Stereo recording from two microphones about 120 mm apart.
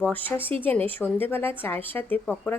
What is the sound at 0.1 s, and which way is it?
A woman's voice, 15° left (ahead or behind).